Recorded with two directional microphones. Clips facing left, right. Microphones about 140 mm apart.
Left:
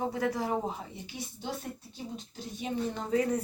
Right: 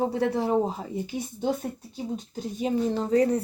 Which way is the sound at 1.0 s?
45° right (ahead or behind).